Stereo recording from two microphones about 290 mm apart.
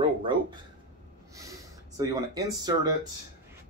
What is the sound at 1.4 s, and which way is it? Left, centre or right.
Speech, centre.